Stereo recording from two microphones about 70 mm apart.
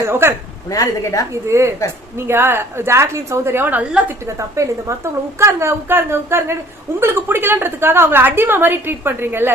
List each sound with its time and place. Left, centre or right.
0.0 s a woman's voice: right
0.7 s a woman's voice: left
1.3 s a woman's voice: right
4.3 s a woman's voice: right